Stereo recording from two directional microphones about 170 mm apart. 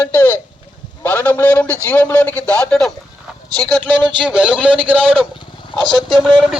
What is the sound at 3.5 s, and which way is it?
Speech, 25° right (ahead or behind).